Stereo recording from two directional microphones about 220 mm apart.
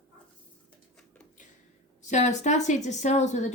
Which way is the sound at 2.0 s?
35° left (ahead or behind).